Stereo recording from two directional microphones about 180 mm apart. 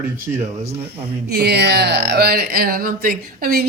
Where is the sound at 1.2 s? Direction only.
65° right (ahead or behind).